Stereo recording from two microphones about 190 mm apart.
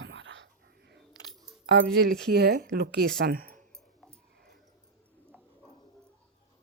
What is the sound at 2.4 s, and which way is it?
Speech, 60° right (ahead or behind).